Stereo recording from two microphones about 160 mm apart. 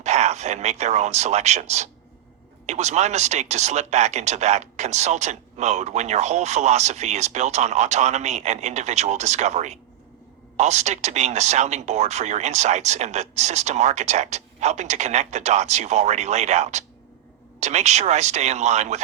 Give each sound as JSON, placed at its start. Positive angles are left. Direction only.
{"t": 0.0, "sound": "speech", "side_deg": -45}